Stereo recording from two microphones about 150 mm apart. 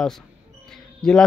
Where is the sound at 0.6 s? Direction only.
5° left (ahead or behind).